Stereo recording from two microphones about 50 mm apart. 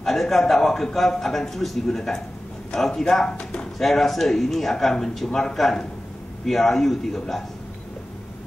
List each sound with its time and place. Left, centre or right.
0.0 s a man's voice: centre
3.7 s a man's voice: centre